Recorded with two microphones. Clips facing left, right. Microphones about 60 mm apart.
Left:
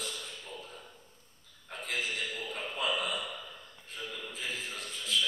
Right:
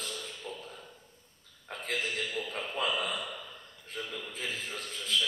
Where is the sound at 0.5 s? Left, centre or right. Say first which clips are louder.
Right 5 dB; right.